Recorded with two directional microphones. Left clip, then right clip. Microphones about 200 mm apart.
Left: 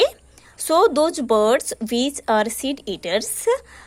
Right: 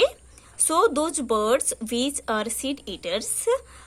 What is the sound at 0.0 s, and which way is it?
Speech, 20° left (ahead or behind).